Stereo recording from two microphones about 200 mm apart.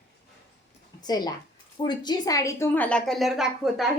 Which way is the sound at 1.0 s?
20° left (ahead or behind).